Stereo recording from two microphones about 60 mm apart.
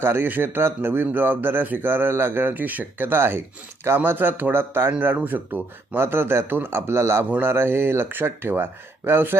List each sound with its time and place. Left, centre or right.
0.0 s a man's voice: right